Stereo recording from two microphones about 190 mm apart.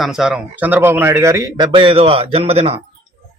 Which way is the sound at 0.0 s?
5° right (ahead or behind).